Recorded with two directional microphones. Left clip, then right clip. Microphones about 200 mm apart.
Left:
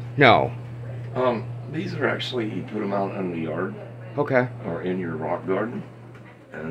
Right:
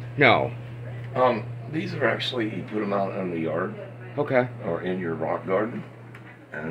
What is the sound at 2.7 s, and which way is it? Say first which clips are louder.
Speech: right 1 dB; 25° right (ahead or behind).